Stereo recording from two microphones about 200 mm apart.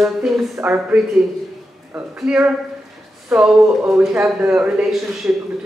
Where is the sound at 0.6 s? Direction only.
5° right (ahead or behind).